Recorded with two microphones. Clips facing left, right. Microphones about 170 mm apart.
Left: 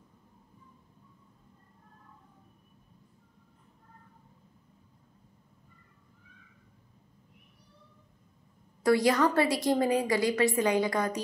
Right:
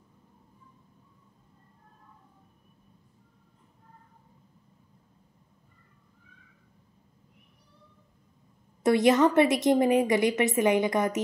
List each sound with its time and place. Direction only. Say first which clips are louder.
8.8 s a woman's voice: right 3 dB; 20° right (ahead or behind)